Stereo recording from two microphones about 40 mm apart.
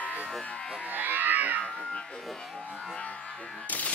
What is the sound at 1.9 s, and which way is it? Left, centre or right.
Speech, centre.